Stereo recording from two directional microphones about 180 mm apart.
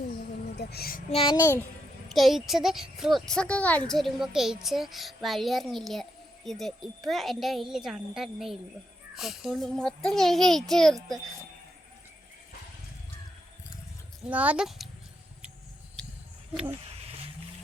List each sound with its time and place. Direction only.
0.5 s speech: 65° left (ahead or behind)
1.1 s a child's voice: 25° left (ahead or behind)
2.0 s speech: centre (ahead or behind)
14.3 s speech: 10° right (ahead or behind)
16.0 s a sound: 5° left (ahead or behind)